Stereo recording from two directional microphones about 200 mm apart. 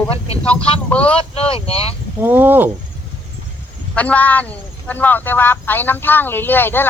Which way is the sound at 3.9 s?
5° left (ahead or behind).